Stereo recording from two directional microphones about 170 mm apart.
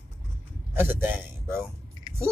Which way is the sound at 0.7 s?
15° right (ahead or behind).